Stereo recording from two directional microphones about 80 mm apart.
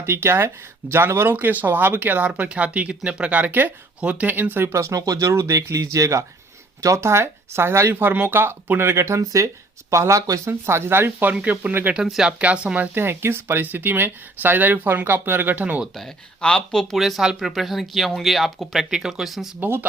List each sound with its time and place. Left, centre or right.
0.0 s speech: right
10.5 s speech: right
11.9 s speech: centre
16.0 s speech: centre
16.9 s speech: centre
19.5 s speech: right